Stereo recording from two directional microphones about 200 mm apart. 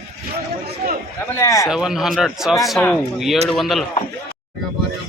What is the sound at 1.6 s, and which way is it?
A man's voice, 5° right (ahead or behind).